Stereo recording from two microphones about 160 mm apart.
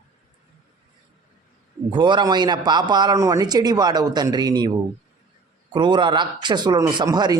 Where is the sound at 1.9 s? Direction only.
30° right (ahead or behind).